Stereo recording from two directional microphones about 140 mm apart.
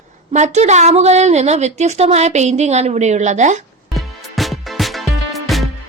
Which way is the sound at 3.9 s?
Centre (ahead or behind).